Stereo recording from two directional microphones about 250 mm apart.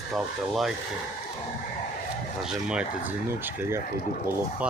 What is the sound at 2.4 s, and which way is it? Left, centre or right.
Speech, centre.